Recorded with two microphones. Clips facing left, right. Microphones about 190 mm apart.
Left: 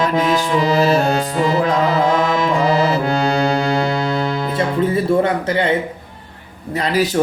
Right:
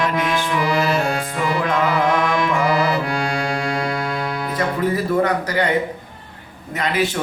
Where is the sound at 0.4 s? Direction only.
25° left (ahead or behind).